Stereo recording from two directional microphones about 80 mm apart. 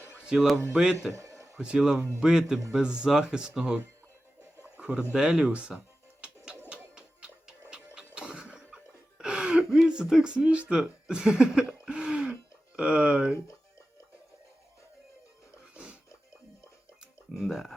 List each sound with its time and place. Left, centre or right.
0.3 s speech: centre
1.1 s a sound: right
1.5 s speech: centre
4.8 s speech: centre
6.2 s music: centre
9.7 s speech: centre
15.7 s a sound: centre
17.3 s speech: centre